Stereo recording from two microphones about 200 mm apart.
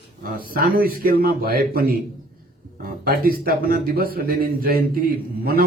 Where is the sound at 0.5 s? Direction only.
45° right (ahead or behind).